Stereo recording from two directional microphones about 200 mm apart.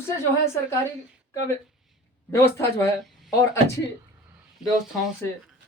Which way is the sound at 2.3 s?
15° left (ahead or behind).